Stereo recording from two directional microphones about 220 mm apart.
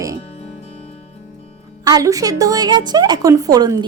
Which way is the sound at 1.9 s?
15° right (ahead or behind).